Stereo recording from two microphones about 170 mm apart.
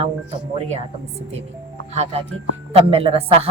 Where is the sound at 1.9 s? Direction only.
40° right (ahead or behind).